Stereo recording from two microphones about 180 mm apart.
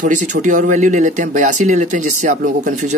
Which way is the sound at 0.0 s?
45° right (ahead or behind).